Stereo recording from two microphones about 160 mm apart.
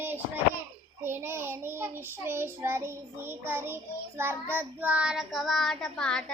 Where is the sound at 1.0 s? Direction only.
15° right (ahead or behind).